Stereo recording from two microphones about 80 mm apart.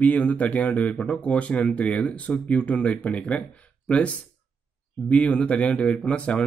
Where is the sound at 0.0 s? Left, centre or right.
Centre.